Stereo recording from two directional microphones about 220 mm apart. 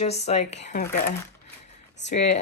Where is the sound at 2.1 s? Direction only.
30° left (ahead or behind).